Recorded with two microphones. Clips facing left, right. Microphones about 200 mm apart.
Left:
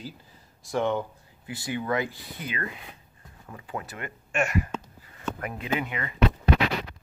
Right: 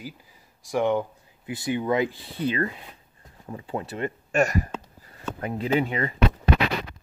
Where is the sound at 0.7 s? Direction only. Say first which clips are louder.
Right 3 dB; 15° right (ahead or behind); by 6.1 s 35° right (ahead or behind).